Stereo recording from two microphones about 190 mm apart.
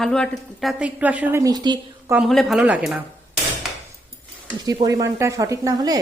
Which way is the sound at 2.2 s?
Centre (ahead or behind).